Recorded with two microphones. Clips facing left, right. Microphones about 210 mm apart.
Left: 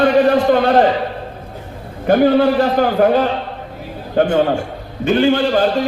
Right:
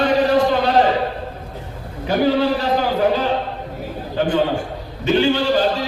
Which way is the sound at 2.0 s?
50° left (ahead or behind).